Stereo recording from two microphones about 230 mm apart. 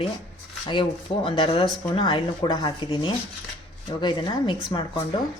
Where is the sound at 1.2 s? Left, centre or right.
Left.